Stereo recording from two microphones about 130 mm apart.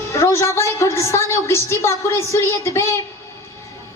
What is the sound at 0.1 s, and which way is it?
A woman's voice, 20° left (ahead or behind).